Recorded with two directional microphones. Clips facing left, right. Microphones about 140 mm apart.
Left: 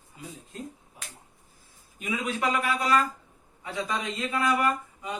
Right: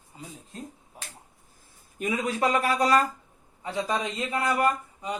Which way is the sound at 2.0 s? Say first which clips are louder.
Right 3 dB; 35° right (ahead or behind).